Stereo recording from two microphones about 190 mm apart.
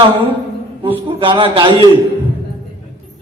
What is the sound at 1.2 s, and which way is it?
Chant, 25° right (ahead or behind).